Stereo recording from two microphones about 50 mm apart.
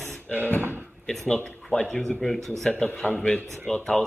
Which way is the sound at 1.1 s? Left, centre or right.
Centre.